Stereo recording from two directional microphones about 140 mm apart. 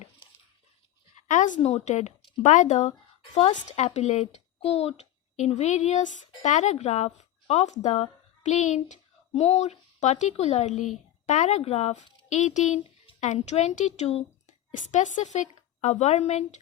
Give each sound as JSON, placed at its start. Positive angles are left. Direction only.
{"t": 1.3, "sound": "speech", "side_deg": 65}
{"t": 1.5, "sound": "a woman's voice", "side_deg": 45}